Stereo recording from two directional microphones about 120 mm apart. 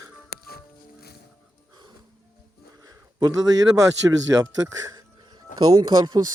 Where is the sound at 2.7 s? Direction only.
30° right (ahead or behind).